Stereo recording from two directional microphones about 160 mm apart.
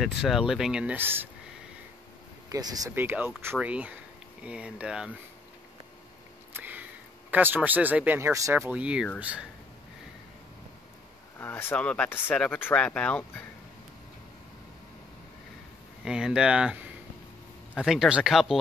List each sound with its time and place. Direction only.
0.0 s speech: 5° right (ahead or behind)
2.5 s speech: 25° right (ahead or behind)
3.0 s speech: 15° right (ahead or behind)
6.5 s speech: 10° right (ahead or behind)
11.3 s speech: 15° left (ahead or behind)
16.0 s speech: 5° right (ahead or behind)